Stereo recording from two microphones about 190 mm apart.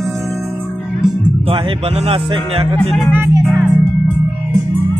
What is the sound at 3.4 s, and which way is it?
Music, 5° right (ahead or behind).